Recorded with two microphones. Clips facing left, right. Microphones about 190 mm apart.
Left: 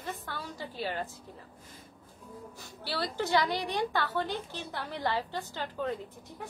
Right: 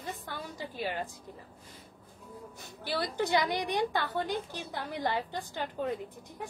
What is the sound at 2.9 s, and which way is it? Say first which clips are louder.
A woman's voice: even; 15° right (ahead or behind).